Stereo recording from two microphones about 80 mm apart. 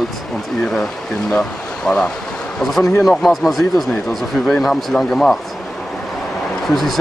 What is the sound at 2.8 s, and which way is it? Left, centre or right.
Speech, left.